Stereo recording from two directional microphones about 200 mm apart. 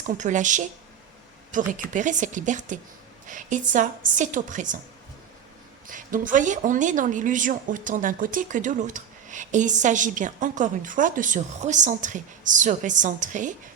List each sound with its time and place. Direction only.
0.0 s speech: 40° right (ahead or behind)
5.9 s speech: 40° right (ahead or behind)